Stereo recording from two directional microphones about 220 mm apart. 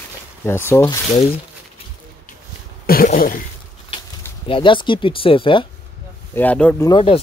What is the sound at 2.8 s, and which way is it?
Speech, 40° left (ahead or behind).